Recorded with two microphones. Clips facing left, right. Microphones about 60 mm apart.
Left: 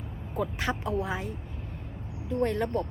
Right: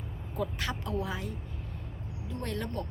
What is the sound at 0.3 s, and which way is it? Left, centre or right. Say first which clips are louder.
Speech: left 4 dB; left.